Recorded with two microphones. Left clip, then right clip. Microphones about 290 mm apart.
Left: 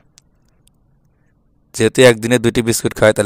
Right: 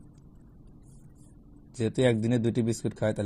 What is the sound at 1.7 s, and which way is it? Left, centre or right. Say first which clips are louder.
Speech: left 16 dB; left.